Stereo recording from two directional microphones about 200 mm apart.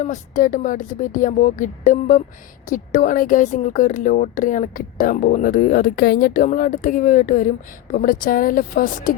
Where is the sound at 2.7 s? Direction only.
40° left (ahead or behind).